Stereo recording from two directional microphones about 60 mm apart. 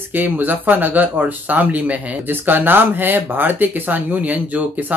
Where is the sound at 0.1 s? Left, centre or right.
Right.